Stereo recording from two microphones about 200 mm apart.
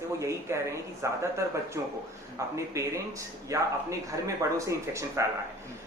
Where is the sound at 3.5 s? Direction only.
15° right (ahead or behind).